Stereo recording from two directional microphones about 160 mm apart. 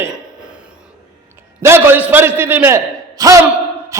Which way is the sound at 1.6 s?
15° right (ahead or behind).